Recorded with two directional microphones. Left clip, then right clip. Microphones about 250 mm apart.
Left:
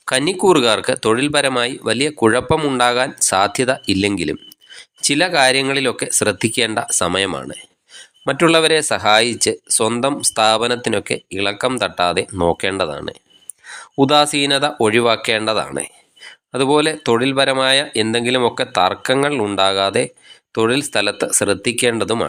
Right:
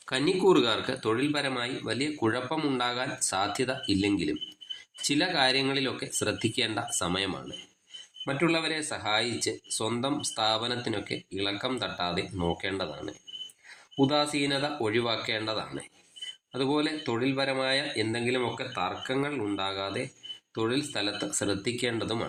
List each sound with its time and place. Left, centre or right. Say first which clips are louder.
0.0 s speech: left 9 dB; left
14.0 s speech: left 13 dB; left